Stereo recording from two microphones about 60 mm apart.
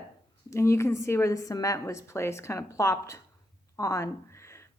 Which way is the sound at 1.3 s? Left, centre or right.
Left.